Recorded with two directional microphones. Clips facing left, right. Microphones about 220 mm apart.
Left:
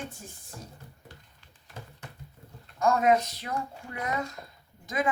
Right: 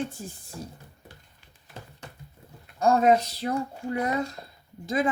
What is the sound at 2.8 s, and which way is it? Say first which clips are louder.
Speech: right 3 dB; 30° right (ahead or behind).